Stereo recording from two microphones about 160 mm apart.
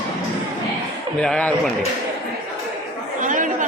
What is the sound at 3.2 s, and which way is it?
Chatter, 55° right (ahead or behind).